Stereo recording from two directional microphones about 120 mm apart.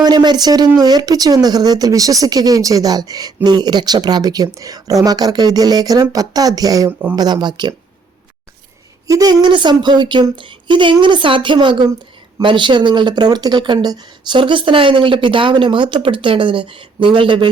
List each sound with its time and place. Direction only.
0.0 s speech: 35° right (ahead or behind)
9.0 s speech: 30° right (ahead or behind)